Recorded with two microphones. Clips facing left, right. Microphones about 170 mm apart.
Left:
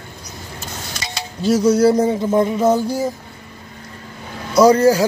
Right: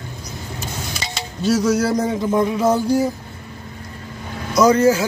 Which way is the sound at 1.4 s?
30° left (ahead or behind).